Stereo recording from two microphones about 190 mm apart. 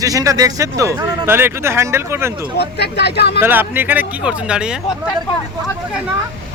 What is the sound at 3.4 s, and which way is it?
Speech, 10° right (ahead or behind).